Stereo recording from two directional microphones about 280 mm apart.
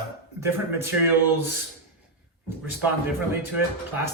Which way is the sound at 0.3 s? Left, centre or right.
Centre.